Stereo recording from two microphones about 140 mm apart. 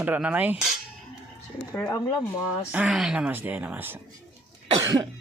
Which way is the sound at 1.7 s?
15° left (ahead or behind).